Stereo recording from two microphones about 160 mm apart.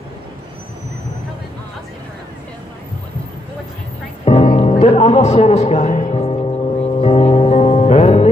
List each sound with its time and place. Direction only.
4.2 s music: 35° left (ahead or behind)